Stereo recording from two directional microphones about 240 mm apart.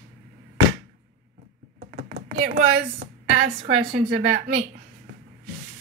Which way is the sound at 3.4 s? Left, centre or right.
Right.